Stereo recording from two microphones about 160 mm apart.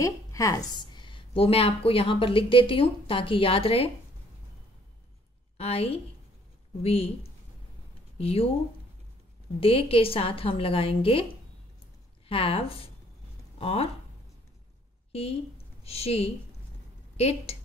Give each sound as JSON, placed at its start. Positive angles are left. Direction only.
{"t": 0.0, "sound": "a woman's voice", "side_deg": 20}
{"t": 5.6, "sound": "a woman's voice", "side_deg": 40}
{"t": 8.2, "sound": "a woman's voice", "side_deg": 35}
{"t": 9.6, "sound": "a woman's voice", "side_deg": 35}
{"t": 12.3, "sound": "a woman's voice", "side_deg": 35}
{"t": 15.1, "sound": "a woman's voice", "side_deg": 40}